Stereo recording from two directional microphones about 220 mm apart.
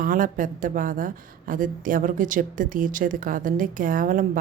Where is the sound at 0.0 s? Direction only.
40° right (ahead or behind).